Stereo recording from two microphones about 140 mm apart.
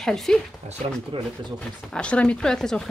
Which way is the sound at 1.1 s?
40° right (ahead or behind).